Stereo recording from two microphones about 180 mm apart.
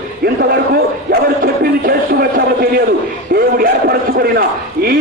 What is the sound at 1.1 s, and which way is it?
Speech, 55° right (ahead or behind).